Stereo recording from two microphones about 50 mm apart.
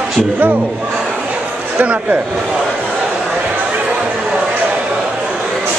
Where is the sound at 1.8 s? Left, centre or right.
Right.